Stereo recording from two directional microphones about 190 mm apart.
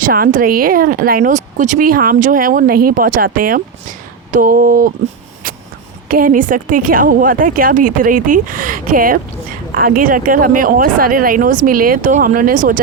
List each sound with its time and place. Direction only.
0.0 s speech: 50° right (ahead or behind)
6.1 s speech: 50° right (ahead or behind)